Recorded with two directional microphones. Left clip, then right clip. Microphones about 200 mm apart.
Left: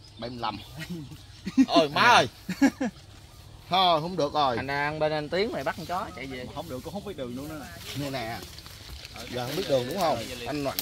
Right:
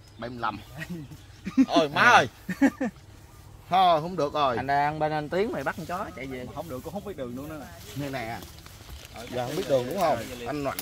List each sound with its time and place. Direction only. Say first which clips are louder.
0.2 s speech: right 1 dB; 5° left (ahead or behind)
1.7 s speech: right 1 dB; 10° left (ahead or behind)
2.4 s speech: even; 20° right (ahead or behind)
3.7 s speech: right 2 dB; 10° left (ahead or behind)
4.6 s speech: right 3 dB; 55° right (ahead or behind)
6.5 s speech: right 1 dB; 10° right (ahead or behind)
9.4 s speech: right 1 dB; 10° right (ahead or behind); by 10.8 s 5° left (ahead or behind)